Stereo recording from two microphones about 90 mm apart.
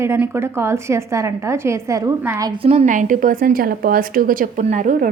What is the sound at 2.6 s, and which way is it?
Speech, 90° right.